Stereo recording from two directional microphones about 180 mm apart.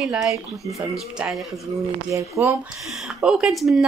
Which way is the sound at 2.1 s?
15° right (ahead or behind).